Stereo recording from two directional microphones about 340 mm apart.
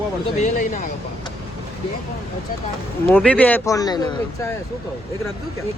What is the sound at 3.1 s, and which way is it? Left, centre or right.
Speech, centre.